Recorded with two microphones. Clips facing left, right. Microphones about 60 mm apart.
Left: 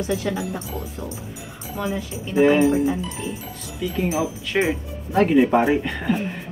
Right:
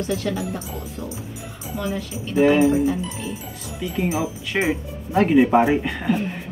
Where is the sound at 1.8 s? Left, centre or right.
Centre.